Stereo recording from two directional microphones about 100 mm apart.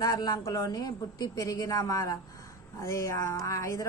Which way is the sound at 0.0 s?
35° left (ahead or behind).